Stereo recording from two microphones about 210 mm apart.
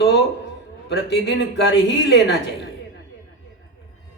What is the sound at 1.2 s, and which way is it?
A man's voice, 55° left (ahead or behind).